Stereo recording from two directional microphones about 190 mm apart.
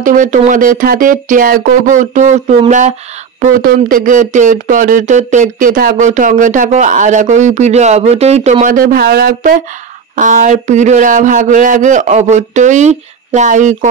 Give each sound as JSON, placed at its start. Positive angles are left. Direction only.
{"t": 0.0, "sound": "speech", "side_deg": -45}